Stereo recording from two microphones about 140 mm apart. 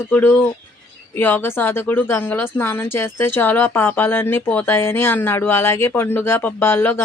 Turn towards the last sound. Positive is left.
turn(degrees=15)  # may be behind; listen again after turning